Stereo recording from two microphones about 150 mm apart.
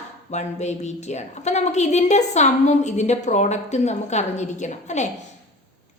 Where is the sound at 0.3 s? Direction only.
50° left (ahead or behind).